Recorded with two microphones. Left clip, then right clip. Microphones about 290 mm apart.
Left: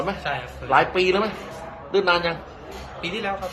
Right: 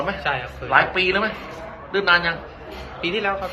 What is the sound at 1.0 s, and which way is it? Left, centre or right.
A man's voice, left.